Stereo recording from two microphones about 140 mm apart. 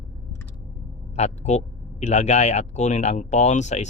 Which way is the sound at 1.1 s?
50° left (ahead or behind).